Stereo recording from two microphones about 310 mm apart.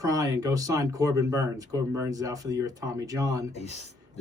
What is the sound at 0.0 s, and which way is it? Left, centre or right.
Speech, centre.